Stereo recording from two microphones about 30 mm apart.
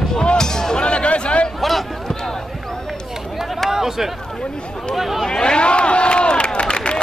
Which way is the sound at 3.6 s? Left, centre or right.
Centre.